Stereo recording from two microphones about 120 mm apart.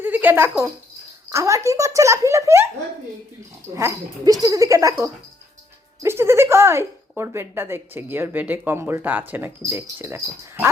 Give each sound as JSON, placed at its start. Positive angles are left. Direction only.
{"t": 0.0, "sound": "speech", "side_deg": -15}
{"t": 4.2, "sound": "speech", "side_deg": -30}